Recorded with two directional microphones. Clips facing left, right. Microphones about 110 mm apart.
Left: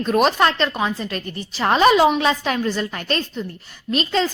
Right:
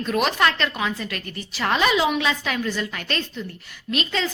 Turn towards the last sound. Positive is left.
turn(degrees=35)  # may be behind; listen again after turning